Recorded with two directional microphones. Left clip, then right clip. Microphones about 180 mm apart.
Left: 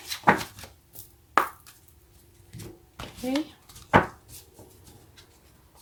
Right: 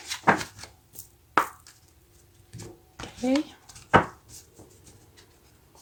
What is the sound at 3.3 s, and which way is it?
Speech, 50° right (ahead or behind).